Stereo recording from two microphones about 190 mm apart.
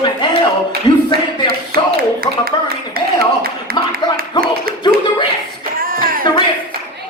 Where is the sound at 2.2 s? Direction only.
50° right (ahead or behind).